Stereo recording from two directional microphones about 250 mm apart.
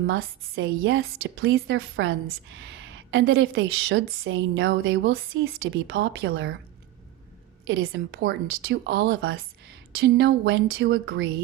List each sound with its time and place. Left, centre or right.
0.1 s speech: right
7.7 s speech: right